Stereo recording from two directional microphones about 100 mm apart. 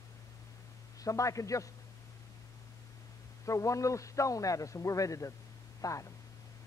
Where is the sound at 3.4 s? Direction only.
30° left (ahead or behind).